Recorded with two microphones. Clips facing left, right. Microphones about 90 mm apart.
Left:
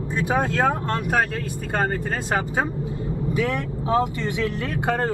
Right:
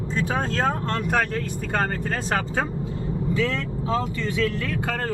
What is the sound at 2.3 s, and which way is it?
Speech, 15° left (ahead or behind).